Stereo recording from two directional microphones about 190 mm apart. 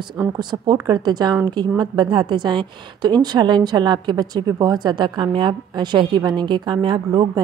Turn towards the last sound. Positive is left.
turn(degrees=-20)  # may be behind; listen again after turning